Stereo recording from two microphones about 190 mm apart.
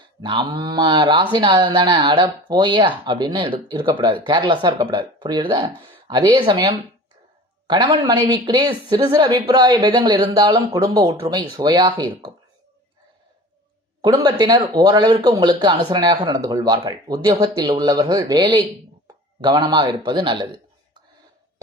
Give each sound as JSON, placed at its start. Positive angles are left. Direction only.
{"t": 0.2, "sound": "speech", "side_deg": -25}
{"t": 14.0, "sound": "speech", "side_deg": -20}